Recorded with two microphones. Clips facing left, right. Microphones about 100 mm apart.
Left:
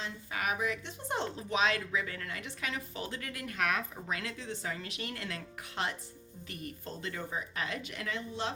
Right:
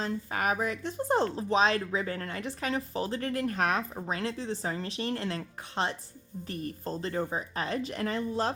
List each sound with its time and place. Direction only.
0.0 s speech: 45° right (ahead or behind)